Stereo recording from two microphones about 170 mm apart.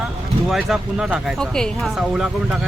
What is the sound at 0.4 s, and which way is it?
A woman's voice, centre (ahead or behind).